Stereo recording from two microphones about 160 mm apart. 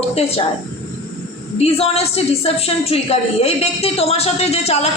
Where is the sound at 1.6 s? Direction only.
40° left (ahead or behind).